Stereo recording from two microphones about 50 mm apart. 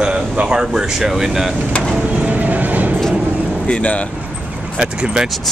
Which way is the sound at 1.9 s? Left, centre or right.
Right.